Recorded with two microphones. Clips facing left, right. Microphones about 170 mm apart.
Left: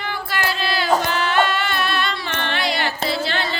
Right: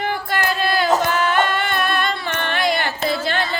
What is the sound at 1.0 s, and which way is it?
Singing, 50° right (ahead or behind).